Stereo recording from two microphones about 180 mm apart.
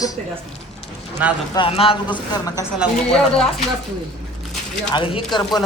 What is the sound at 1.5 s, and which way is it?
Speech, 30° left (ahead or behind).